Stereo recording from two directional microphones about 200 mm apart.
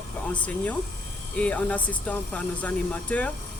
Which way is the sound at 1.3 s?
5° left (ahead or behind).